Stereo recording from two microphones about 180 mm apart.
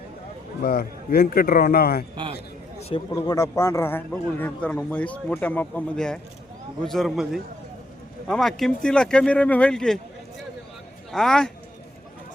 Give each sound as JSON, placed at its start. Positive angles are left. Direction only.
{"t": 0.6, "sound": "speech", "side_deg": 55}
{"t": 2.9, "sound": "a man's voice", "side_deg": 20}
{"t": 11.1, "sound": "speech", "side_deg": 5}